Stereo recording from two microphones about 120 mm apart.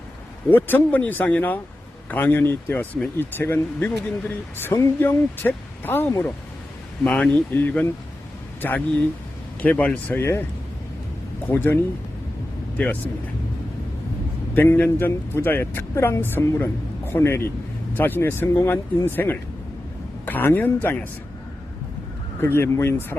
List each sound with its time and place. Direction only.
0.5 s speech: 15° left (ahead or behind)
11.4 s speech: 20° left (ahead or behind)
14.5 s speech: 15° left (ahead or behind)
22.4 s speech: 20° left (ahead or behind)